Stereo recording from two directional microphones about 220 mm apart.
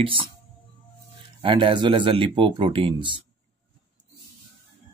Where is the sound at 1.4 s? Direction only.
20° right (ahead or behind).